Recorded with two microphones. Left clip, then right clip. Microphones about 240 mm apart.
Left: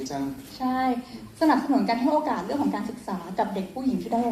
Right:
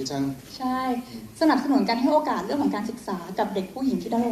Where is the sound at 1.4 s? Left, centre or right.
Right.